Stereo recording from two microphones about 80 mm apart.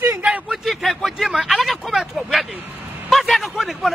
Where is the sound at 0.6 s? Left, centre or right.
Centre.